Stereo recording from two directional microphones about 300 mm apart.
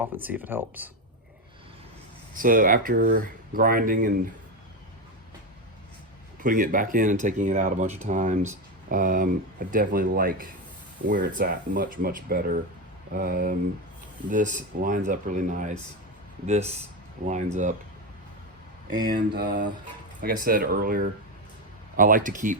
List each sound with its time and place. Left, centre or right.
0.0 s speech: centre
2.3 s speech: right
6.4 s speech: right
19.0 s speech: right